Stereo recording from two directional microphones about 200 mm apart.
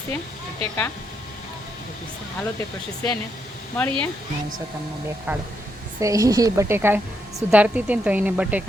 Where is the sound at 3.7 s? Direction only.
5° left (ahead or behind).